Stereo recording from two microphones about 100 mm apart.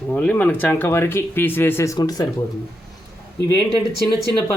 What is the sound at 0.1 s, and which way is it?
Speech, 15° left (ahead or behind).